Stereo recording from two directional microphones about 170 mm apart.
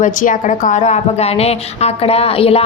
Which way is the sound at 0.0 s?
50° left (ahead or behind).